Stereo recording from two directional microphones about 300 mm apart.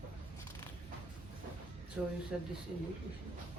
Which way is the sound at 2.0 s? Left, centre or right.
Centre.